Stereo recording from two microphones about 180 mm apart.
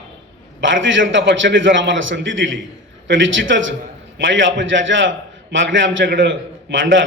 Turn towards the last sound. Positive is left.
turn(degrees=-90)